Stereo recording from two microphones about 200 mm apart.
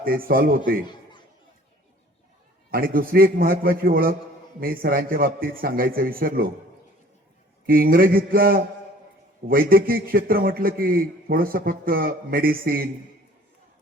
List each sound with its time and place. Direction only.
0.0 s a man's voice: 45° right (ahead or behind)
2.6 s a man's voice: 45° right (ahead or behind)
7.7 s a man's voice: 45° right (ahead or behind)